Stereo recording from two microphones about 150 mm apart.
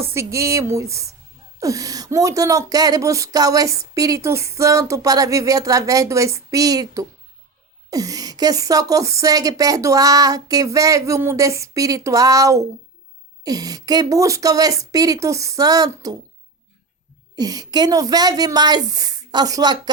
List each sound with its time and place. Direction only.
0.0 s speech: 20° right (ahead or behind)
17.3 s speech: 25° right (ahead or behind)